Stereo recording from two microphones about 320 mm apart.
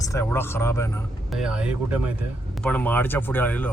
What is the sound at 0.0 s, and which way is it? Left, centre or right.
A man's voice, centre.